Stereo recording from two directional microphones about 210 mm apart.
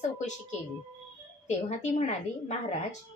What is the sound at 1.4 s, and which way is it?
A woman's voice, 35° left (ahead or behind).